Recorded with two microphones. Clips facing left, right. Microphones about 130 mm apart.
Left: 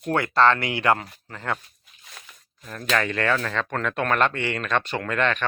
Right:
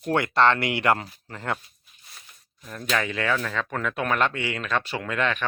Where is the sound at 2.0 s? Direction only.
90° left.